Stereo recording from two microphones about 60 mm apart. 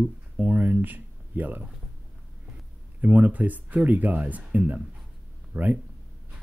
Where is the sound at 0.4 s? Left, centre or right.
Right.